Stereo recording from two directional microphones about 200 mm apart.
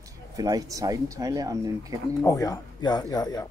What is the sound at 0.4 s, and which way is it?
Speech, 20° right (ahead or behind).